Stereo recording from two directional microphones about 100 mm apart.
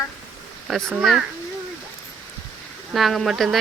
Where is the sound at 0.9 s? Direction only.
5° right (ahead or behind).